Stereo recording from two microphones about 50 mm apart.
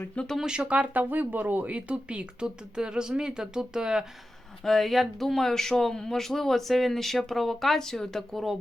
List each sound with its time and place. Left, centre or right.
0.3 s speech: centre
1.0 s speech: right; by 4.0 s centre
4.6 s speech: centre